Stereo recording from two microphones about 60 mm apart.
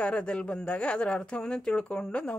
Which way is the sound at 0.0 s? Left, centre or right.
Centre.